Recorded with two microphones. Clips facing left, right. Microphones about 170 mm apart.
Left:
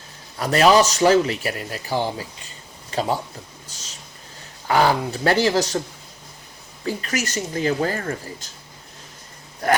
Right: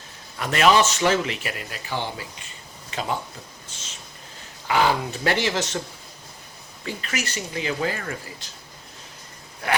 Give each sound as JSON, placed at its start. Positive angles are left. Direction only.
{"t": 0.3, "sound": "speech", "side_deg": 35}
{"t": 4.7, "sound": "speech", "side_deg": 40}
{"t": 6.8, "sound": "speech", "side_deg": 40}
{"t": 9.6, "sound": "a sound", "side_deg": 40}